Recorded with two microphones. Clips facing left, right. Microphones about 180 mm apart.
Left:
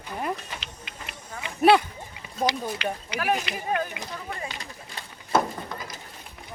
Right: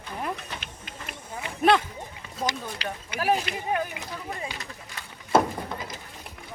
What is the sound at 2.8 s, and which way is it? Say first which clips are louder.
Speech: right 3 dB; 35° right (ahead or behind).